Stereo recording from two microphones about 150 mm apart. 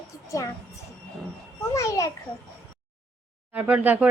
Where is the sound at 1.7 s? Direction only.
20° left (ahead or behind).